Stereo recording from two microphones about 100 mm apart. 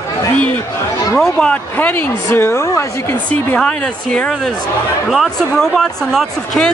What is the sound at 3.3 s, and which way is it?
Speech, 15° left (ahead or behind).